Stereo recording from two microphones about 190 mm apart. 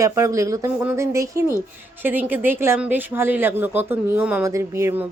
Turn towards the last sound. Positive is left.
turn(degrees=-15)  # may be behind; listen again after turning